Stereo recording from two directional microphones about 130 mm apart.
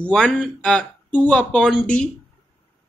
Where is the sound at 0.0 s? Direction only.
5° left (ahead or behind).